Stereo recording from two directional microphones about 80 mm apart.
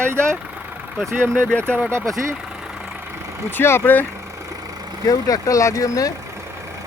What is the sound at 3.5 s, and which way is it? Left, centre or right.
Speech, left.